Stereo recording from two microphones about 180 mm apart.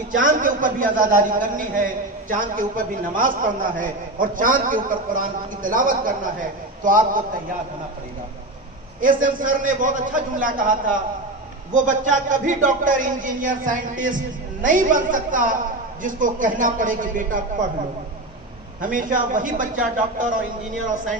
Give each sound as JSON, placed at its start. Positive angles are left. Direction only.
{"t": 0.1, "sound": "a man's voice", "side_deg": -50}
{"t": 9.0, "sound": "a man's voice", "side_deg": -50}
{"t": 11.8, "sound": "a man's voice", "side_deg": -45}
{"t": 18.8, "sound": "a man's voice", "side_deg": -50}